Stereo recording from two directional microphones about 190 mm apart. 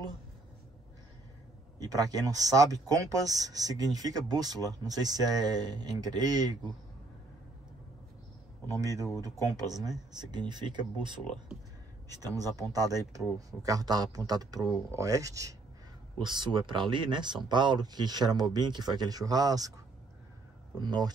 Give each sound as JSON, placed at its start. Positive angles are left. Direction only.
{"t": 1.8, "sound": "speech", "side_deg": -20}
{"t": 8.6, "sound": "speech", "side_deg": -15}
{"t": 20.7, "sound": "speech", "side_deg": -20}